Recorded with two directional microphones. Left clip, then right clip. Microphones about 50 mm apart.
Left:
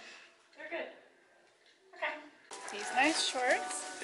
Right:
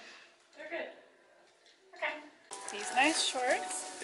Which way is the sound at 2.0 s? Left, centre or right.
Centre.